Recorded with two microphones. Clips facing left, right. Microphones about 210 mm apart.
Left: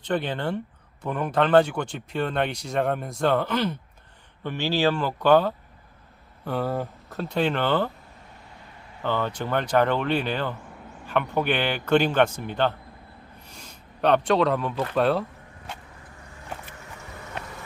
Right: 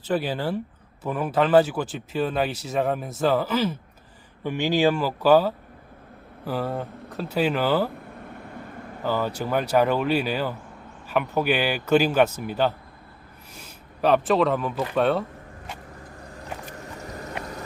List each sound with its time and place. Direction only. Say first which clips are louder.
0.0 s a man's voice: right 1 dB; 5° right (ahead or behind)
8.2 s vehicle: right 10 dB; 55° right (ahead or behind)
9.0 s a man's voice: right 1 dB; 5° right (ahead or behind)
16.4 s vehicle: right 3 dB; 40° right (ahead or behind)